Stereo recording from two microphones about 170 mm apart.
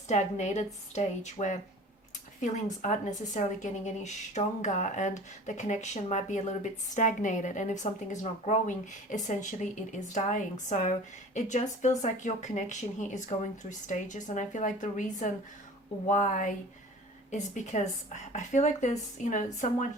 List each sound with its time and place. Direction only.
0.1 s a woman's voice: 45° left (ahead or behind)
2.8 s a woman's voice: 45° left (ahead or behind)